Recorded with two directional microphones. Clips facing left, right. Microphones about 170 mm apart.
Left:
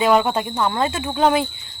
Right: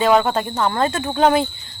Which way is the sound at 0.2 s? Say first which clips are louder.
Right 1 dB; 10° left (ahead or behind).